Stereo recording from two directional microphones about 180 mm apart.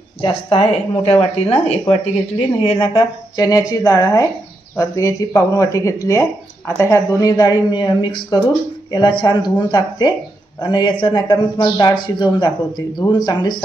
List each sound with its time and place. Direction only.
0.2 s a woman's voice: 30° left (ahead or behind)